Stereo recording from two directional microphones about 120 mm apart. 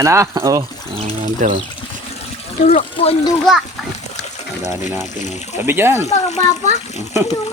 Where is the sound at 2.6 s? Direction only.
60° left (ahead or behind).